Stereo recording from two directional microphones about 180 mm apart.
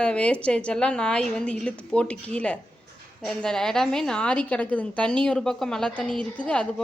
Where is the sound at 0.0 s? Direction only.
5° left (ahead or behind).